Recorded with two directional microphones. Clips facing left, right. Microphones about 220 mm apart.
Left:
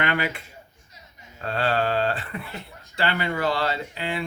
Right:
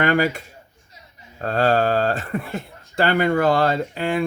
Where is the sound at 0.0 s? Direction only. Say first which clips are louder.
Right 7 dB; 45° right (ahead or behind).